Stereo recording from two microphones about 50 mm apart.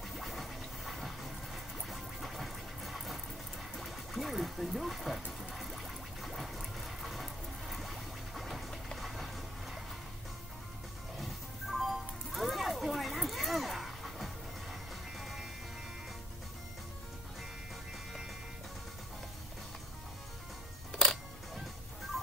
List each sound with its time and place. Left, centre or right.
0.1 s scratch: centre
3.7 s music: centre
5.5 s a sound: centre
11.1 s music: centre
20.9 s music: centre